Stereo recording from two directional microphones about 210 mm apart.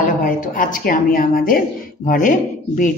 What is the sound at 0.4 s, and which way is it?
A woman's voice, 40° left (ahead or behind).